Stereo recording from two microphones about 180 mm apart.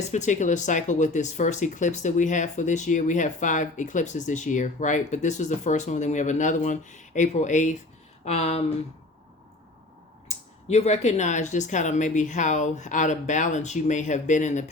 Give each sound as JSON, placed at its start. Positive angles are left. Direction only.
{"t": 0.1, "sound": "speech", "side_deg": 40}
{"t": 10.2, "sound": "speech", "side_deg": 35}